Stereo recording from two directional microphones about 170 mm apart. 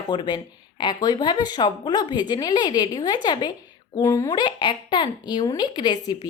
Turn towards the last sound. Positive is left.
turn(degrees=25)  # may be behind; listen again after turning